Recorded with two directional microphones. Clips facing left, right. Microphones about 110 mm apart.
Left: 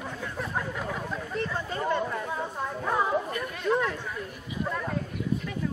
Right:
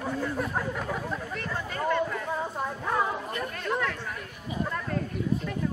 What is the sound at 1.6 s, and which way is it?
Chatter, 20° left (ahead or behind).